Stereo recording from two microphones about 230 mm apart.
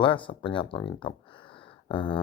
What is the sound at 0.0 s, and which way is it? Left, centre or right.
Speech, left.